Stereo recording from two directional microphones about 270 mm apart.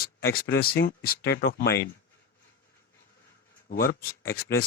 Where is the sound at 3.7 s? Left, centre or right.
Left.